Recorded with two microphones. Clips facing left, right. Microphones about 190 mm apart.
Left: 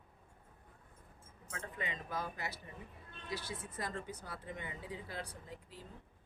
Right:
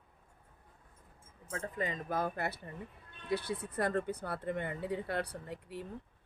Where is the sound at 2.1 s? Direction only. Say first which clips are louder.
Right 7 dB; 55° right (ahead or behind).